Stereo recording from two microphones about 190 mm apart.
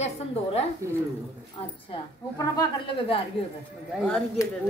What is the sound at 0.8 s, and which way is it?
Speech, 15° right (ahead or behind).